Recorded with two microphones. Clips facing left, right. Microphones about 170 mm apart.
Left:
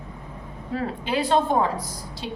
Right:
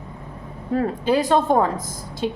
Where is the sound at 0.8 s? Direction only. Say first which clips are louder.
Right 6 dB; 45° right (ahead or behind).